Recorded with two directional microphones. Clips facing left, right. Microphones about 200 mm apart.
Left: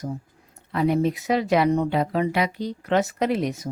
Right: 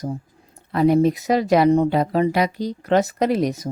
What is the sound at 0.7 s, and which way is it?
Speech, 40° right (ahead or behind).